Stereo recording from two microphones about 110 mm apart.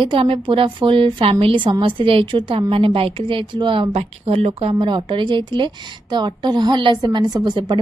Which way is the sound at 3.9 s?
65° right (ahead or behind).